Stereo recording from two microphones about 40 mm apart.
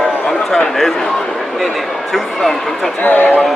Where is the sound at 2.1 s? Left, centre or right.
Centre.